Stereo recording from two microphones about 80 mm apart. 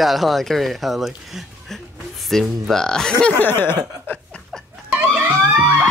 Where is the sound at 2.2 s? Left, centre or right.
Centre.